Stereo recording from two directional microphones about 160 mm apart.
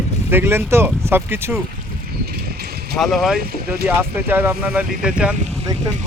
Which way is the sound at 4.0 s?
15° right (ahead or behind).